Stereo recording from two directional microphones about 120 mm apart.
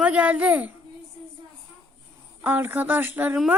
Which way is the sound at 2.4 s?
15° right (ahead or behind).